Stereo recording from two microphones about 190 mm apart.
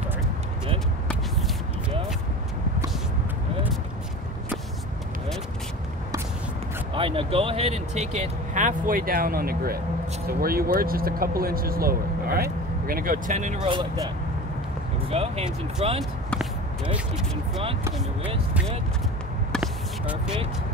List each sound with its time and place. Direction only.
6.9 s speech: 25° right (ahead or behind)
13.6 s speech: 25° right (ahead or behind)
16.0 s basketball bounce: centre (ahead or behind)
19.5 s a sound: centre (ahead or behind)